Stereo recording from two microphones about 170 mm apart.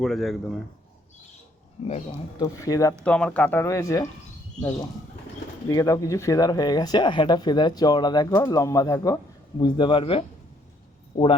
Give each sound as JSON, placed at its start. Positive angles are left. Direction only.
{"t": 0.0, "sound": "speech", "side_deg": 0}
{"t": 2.4, "sound": "speech", "side_deg": 20}
{"t": 3.0, "sound": "speech", "side_deg": 5}
{"t": 5.6, "sound": "speech", "side_deg": 20}